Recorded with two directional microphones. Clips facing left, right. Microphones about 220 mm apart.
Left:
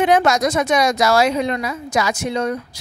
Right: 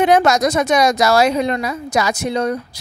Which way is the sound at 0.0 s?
40° right (ahead or behind).